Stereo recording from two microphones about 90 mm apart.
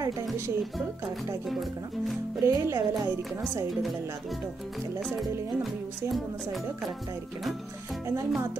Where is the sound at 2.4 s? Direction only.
35° right (ahead or behind).